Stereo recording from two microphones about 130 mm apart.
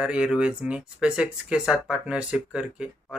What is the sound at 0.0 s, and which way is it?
Speech, 5° right (ahead or behind).